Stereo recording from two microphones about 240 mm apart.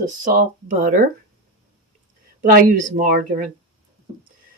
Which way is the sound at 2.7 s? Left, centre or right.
Right.